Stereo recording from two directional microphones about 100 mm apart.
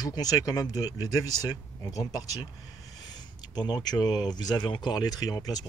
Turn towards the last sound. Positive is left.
turn(degrees=40)  # may be behind; listen again after turning